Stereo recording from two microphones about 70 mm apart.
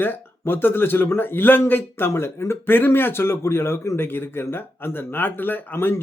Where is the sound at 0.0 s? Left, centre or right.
Left.